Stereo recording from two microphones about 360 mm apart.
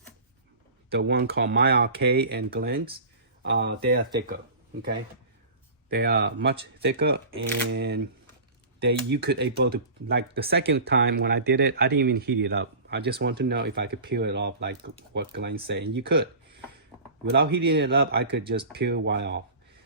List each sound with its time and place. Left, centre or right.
0.9 s speech: right
5.9 s speech: right
17.3 s speech: right